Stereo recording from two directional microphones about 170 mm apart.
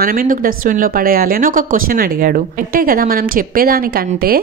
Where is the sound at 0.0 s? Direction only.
55° right (ahead or behind).